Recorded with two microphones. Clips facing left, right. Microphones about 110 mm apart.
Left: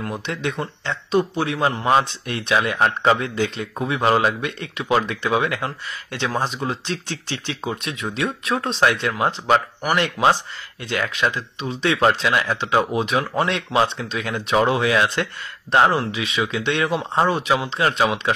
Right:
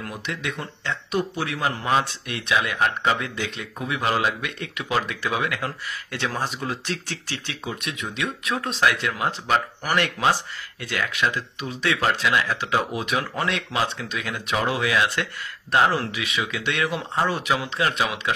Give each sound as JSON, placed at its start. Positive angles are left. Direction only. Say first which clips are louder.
{"t": 0.0, "sound": "speech", "louder": "left 5 dB", "side_deg": 30}